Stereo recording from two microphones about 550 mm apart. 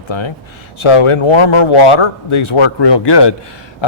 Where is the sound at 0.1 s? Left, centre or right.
Left.